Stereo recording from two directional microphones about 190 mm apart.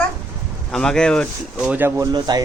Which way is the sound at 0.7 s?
5° left (ahead or behind).